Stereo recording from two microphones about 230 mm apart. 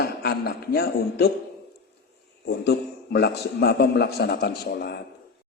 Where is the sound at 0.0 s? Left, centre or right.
Left.